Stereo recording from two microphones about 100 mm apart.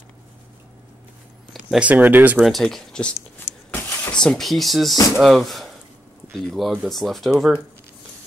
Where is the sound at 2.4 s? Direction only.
Centre (ahead or behind).